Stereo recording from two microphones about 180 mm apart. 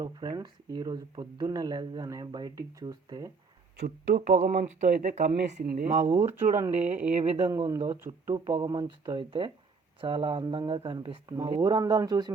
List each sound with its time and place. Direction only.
0.0 s speech: 20° right (ahead or behind)
3.8 s speech: 50° right (ahead or behind)
7.1 s speech: 30° right (ahead or behind)